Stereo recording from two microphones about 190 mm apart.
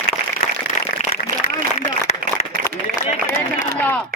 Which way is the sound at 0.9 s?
55° left (ahead or behind).